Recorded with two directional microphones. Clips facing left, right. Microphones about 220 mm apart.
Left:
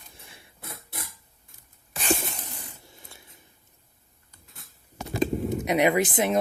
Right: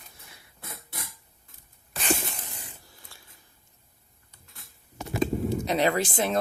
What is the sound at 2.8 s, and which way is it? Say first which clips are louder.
Dishes: left 4 dB; 20° left (ahead or behind).